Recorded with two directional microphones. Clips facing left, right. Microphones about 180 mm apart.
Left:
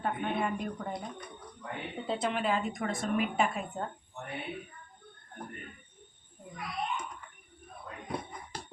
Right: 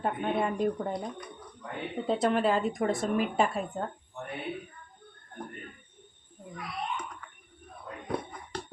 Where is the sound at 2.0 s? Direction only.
40° right (ahead or behind).